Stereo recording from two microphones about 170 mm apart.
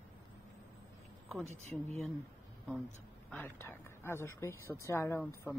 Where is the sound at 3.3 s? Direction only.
10° left (ahead or behind).